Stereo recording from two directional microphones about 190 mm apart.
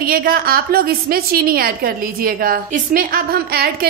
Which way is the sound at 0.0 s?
50° right (ahead or behind).